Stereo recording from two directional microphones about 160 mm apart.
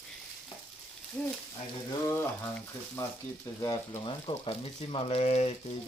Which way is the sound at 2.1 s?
15° left (ahead or behind).